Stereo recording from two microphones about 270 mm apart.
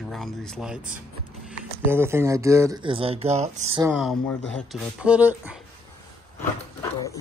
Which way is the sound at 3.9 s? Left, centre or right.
Centre.